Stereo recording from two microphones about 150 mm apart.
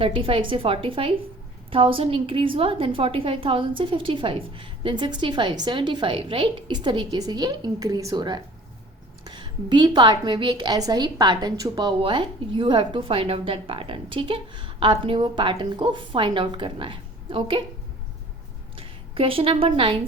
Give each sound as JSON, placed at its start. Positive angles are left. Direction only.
{"t": 0.0, "sound": "a woman's voice", "side_deg": -35}
{"t": 18.8, "sound": "a woman's voice", "side_deg": -35}